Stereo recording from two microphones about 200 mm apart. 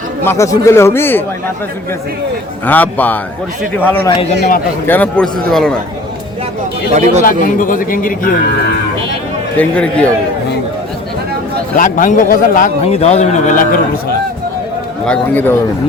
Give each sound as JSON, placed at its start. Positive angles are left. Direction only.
{"t": 0.3, "sound": "speech", "side_deg": 15}
{"t": 2.6, "sound": "speech", "side_deg": 10}
{"t": 7.3, "sound": "a man's voice", "side_deg": 45}
{"t": 9.6, "sound": "speech", "side_deg": 5}
{"t": 11.8, "sound": "a man's voice", "side_deg": 40}
{"t": 12.8, "sound": "a man's voice", "side_deg": 30}
{"t": 15.0, "sound": "speech", "side_deg": 5}